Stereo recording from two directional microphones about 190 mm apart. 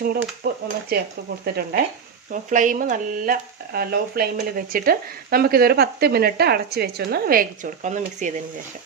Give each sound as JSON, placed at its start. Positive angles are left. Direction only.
{"t": 0.0, "sound": "speech", "side_deg": -50}
{"t": 2.3, "sound": "speech", "side_deg": -40}